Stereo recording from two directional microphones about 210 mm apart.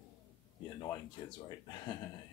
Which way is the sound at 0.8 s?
20° left (ahead or behind).